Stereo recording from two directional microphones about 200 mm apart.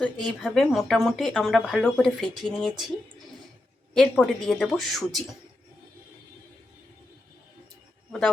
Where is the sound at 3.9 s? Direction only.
Centre (ahead or behind).